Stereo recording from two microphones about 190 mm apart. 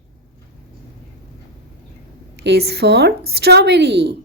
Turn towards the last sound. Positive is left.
turn(degrees=-60)  # may be behind; listen again after turning